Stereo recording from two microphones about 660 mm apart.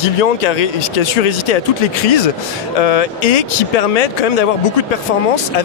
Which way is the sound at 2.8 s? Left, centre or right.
Left.